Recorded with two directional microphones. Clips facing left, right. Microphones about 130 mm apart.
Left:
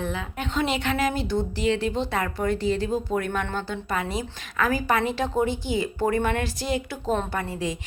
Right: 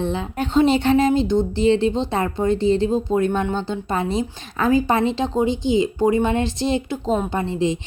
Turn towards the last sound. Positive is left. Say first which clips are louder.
# right 7 dB
turn(degrees=-25)  # may be behind; listen again after turning